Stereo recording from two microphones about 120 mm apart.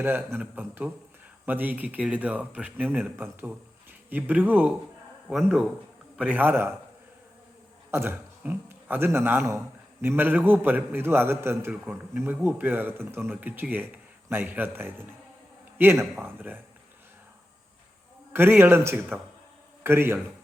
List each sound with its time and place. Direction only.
0.0 s a man's voice: 15° right (ahead or behind)
7.9 s a man's voice: 20° right (ahead or behind)
18.3 s a man's voice: 15° right (ahead or behind)